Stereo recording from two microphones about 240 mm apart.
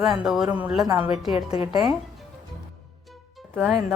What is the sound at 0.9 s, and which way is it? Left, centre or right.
Speech, centre.